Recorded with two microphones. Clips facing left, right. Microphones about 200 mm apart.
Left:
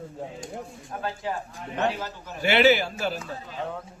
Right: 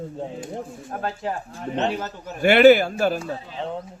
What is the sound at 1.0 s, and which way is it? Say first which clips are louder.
Speech: right 2 dB; 40° right (ahead or behind).